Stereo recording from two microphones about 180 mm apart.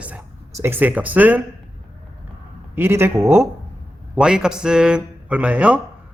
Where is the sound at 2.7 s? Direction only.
10° right (ahead or behind).